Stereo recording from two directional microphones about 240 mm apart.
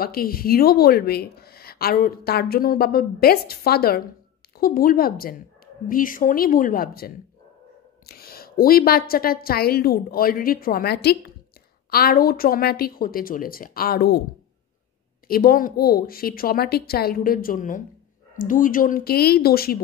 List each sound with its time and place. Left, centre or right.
0.0 s speech: left
15.2 s speech: left